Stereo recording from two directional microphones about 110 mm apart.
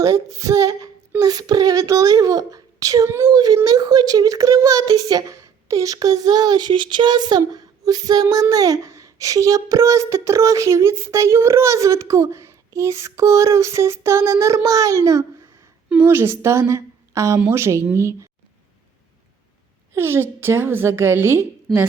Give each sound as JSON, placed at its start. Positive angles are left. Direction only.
{"t": 0.0, "sound": "a child's voice", "side_deg": -30}
{"t": 15.9, "sound": "a woman's voice", "side_deg": -20}
{"t": 19.9, "sound": "a child's voice", "side_deg": -20}
{"t": 21.7, "sound": "a woman's voice", "side_deg": 0}